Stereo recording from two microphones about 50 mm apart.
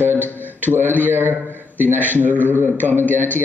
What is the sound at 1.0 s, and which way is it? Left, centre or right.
A man's voice, right.